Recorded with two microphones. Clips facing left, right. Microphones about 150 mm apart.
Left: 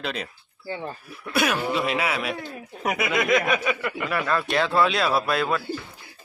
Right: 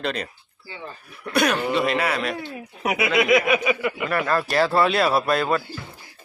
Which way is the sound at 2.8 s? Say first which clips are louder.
Right 3 dB; 5° right (ahead or behind).